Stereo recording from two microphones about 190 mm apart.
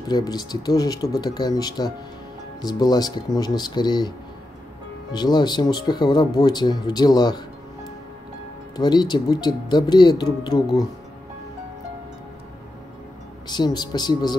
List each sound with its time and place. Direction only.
0.1 s speech: 20° left (ahead or behind)
5.1 s speech: 20° left (ahead or behind)
8.7 s speech: 20° left (ahead or behind)
13.5 s speech: 20° left (ahead or behind)